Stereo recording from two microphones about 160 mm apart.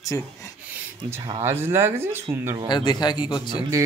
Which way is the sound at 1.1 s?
20° right (ahead or behind).